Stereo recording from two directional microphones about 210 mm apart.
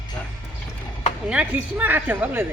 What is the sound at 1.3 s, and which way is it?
A woman's voice, 5° right (ahead or behind).